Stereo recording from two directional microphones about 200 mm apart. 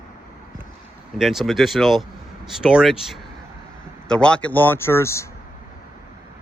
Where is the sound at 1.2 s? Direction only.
Centre (ahead or behind).